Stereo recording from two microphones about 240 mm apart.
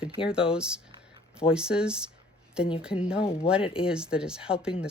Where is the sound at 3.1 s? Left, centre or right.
Left.